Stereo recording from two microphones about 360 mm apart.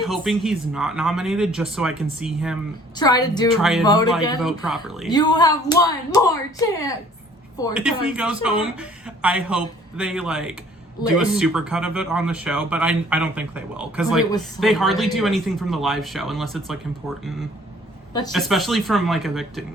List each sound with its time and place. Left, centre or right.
0.0 s speech: centre
2.9 s speech: centre
3.6 s speech: centre
3.8 s speech: centre
4.4 s speech: centre
5.1 s speech: centre
7.7 s speech: centre
18.3 s speech: centre